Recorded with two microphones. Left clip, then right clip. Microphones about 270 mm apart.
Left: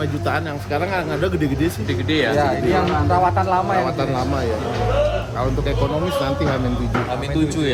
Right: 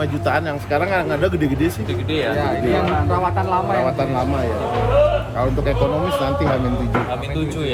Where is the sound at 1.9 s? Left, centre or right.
Left.